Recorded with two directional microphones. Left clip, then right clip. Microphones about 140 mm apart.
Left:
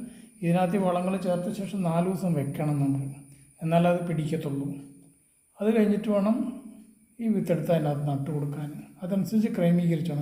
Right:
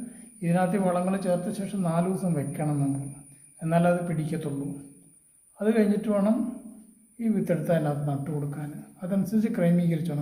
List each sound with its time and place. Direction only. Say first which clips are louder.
0.4 s a man's voice: even; 10° left (ahead or behind)
5.5 s a man's voice: even; 10° left (ahead or behind)